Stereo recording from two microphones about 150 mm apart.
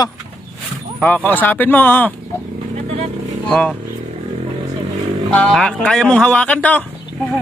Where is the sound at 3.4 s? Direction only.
5° left (ahead or behind).